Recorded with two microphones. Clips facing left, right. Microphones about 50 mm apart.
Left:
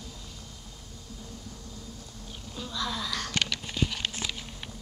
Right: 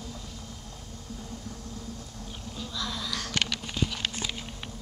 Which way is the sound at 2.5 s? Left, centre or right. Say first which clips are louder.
Left 2 dB; centre.